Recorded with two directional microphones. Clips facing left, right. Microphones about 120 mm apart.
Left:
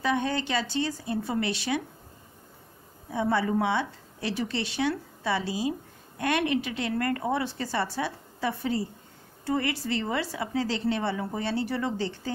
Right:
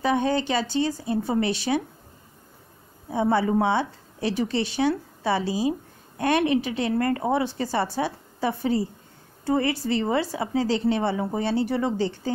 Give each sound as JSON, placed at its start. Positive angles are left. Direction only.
{"t": 0.0, "sound": "a woman's voice", "side_deg": -30}
{"t": 3.1, "sound": "a woman's voice", "side_deg": -30}